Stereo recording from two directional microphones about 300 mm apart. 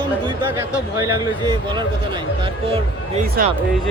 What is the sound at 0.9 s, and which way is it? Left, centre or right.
Speech, centre.